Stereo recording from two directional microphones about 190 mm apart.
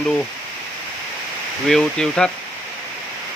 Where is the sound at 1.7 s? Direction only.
5° left (ahead or behind).